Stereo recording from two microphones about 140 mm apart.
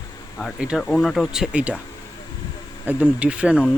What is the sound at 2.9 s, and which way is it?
Speech, 15° right (ahead or behind).